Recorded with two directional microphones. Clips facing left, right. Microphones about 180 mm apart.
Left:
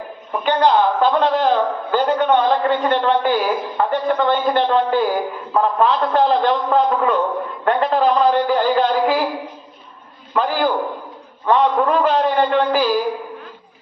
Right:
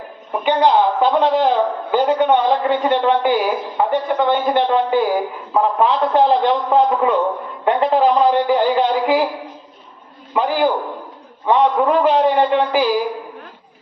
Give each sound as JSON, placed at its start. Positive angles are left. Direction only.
{"t": 0.4, "sound": "a man's voice", "side_deg": -15}
{"t": 10.3, "sound": "a man's voice", "side_deg": -15}